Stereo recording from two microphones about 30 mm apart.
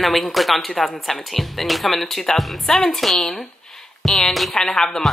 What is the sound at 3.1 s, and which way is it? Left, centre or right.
Speech, left.